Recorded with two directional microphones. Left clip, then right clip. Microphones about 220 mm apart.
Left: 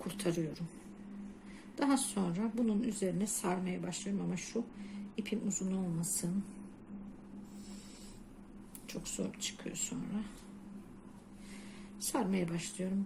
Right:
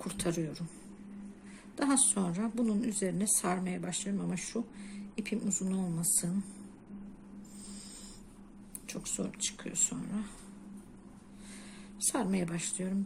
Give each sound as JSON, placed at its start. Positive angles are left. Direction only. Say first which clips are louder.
{"t": 0.0, "sound": "a sound", "louder": "right 1 dB", "side_deg": -15}
{"t": 1.7, "sound": "a woman's voice", "louder": "right 2 dB", "side_deg": -15}
{"t": 8.9, "sound": "speech", "louder": "right 2 dB", "side_deg": -20}
{"t": 11.9, "sound": "speech", "louder": "right 2 dB", "side_deg": -15}